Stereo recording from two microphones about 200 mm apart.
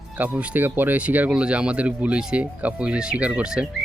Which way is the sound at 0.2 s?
5° right (ahead or behind).